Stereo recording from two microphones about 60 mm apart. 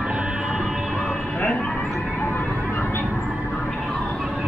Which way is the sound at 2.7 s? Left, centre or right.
Left.